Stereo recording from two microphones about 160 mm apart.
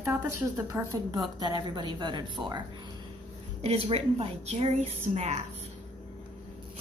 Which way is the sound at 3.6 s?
40° right (ahead or behind).